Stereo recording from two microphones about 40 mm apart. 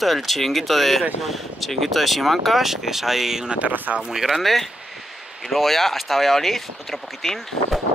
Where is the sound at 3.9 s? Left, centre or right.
Right.